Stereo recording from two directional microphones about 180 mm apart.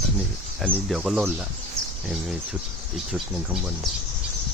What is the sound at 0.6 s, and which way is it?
Speech, centre (ahead or behind).